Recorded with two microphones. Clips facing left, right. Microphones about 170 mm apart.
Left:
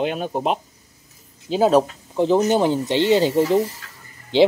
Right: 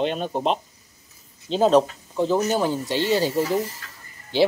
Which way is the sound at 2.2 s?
20° left (ahead or behind).